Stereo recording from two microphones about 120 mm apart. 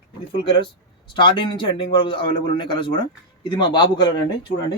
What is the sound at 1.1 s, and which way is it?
A man's voice, 40° left (ahead or behind).